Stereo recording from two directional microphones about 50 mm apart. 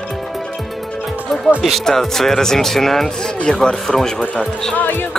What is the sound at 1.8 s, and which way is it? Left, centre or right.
Speech, centre.